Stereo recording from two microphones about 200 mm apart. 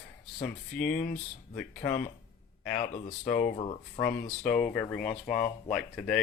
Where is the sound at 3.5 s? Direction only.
30° left (ahead or behind).